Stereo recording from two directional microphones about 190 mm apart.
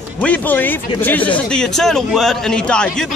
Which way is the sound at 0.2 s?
10° left (ahead or behind).